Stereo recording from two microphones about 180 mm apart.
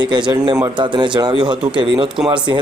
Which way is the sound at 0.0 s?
25° right (ahead or behind).